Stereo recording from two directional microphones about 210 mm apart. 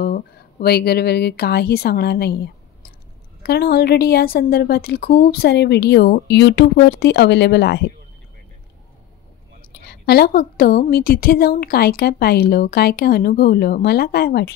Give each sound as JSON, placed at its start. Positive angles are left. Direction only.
{"t": 0.0, "sound": "a woman's voice", "side_deg": 45}
{"t": 3.4, "sound": "a woman's voice", "side_deg": 50}
{"t": 9.8, "sound": "a woman's voice", "side_deg": 50}